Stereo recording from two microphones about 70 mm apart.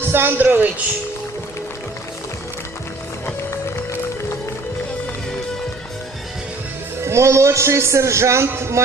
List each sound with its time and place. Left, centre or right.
0.1 s a man's voice: right
7.0 s a man's voice: right